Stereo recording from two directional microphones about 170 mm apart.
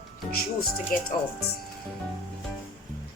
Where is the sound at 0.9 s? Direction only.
55° left (ahead or behind).